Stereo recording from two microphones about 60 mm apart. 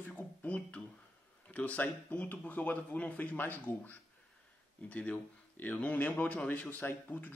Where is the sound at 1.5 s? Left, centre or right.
Left.